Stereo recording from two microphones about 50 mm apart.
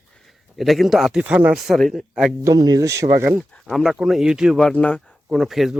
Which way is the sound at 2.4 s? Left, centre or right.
Right.